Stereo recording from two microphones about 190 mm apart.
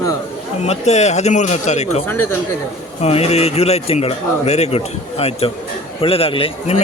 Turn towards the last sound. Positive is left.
turn(degrees=30)  # may be behind; listen again after turning